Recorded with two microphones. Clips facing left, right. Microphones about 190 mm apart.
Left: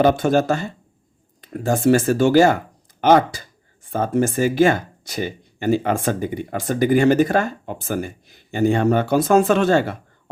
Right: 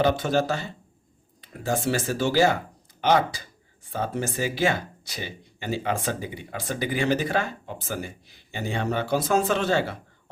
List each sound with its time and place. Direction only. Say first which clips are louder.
0.0 s speech: left 6 dB; 50° left (ahead or behind)